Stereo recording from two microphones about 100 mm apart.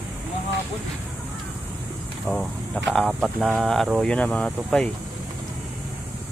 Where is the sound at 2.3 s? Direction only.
Centre (ahead or behind).